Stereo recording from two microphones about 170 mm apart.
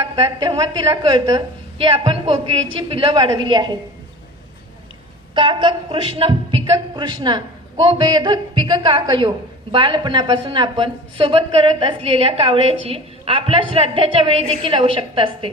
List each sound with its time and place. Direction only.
0.2 s a woman's voice: 25° right (ahead or behind)
5.3 s a woman's voice: 30° right (ahead or behind)